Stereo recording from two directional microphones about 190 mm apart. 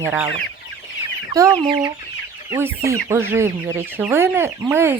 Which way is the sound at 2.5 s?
15° right (ahead or behind).